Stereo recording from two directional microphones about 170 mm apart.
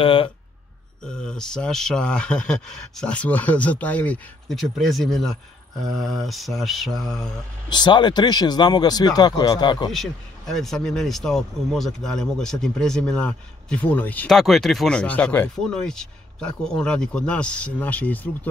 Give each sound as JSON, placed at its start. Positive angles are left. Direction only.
{"t": 0.0, "sound": "speech", "side_deg": 30}
{"t": 1.0, "sound": "speech", "side_deg": 5}
{"t": 7.7, "sound": "speech", "side_deg": 25}
{"t": 9.8, "sound": "speech", "side_deg": 0}